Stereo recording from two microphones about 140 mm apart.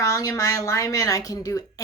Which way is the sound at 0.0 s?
25° left (ahead or behind).